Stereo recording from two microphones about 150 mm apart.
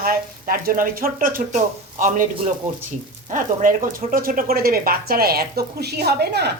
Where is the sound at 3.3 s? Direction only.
60° right (ahead or behind); by 6.5 s 90° right.